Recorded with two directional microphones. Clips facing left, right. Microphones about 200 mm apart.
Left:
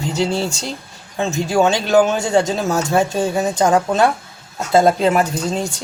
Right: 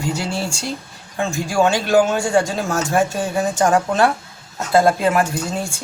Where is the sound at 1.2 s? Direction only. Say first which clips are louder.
Left 2 dB; 20° left (ahead or behind).